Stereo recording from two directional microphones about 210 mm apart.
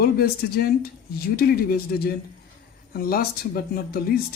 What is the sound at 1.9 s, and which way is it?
Speech, 45° left (ahead or behind).